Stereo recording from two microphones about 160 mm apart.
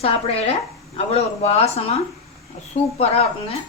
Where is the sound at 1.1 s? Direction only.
40° left (ahead or behind).